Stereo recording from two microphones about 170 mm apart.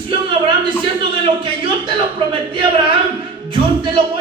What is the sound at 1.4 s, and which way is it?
Speech, 30° right (ahead or behind).